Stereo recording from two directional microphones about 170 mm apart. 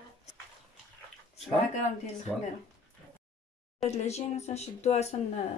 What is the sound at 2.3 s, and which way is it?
Speech, centre (ahead or behind).